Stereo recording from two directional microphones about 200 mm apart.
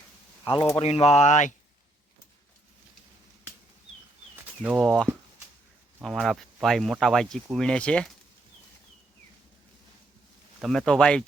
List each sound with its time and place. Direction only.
0.4 s speech: 25° left (ahead or behind)
4.6 s speech: 5° right (ahead or behind)
6.0 s speech: centre (ahead or behind)
10.6 s speech: centre (ahead or behind)